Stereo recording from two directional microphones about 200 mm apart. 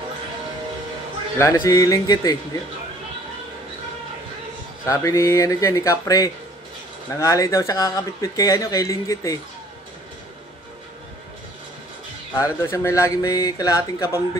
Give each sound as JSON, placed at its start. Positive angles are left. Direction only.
{"t": 1.4, "sound": "speech", "side_deg": 15}
{"t": 4.8, "sound": "speech", "side_deg": 15}
{"t": 12.4, "sound": "speech", "side_deg": 15}